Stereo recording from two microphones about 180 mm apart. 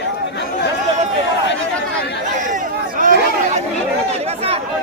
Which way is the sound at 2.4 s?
45° right (ahead or behind).